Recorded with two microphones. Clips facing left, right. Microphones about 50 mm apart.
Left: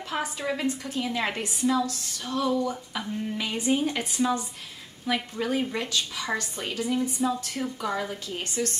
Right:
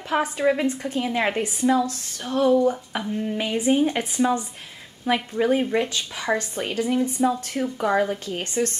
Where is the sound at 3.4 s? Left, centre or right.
Centre.